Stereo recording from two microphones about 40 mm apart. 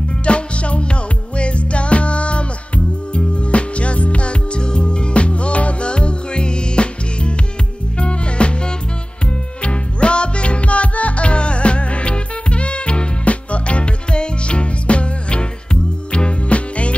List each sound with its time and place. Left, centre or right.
0.2 s music: left
9.6 s music: left